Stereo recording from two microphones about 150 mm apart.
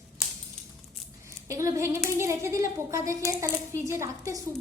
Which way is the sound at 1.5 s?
20° right (ahead or behind).